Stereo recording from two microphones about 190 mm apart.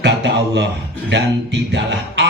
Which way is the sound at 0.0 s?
65° right (ahead or behind).